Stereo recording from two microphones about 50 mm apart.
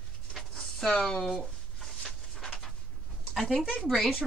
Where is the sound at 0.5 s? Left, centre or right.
Centre.